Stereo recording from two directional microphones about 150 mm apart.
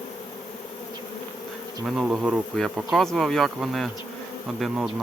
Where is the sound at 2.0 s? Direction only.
Centre (ahead or behind).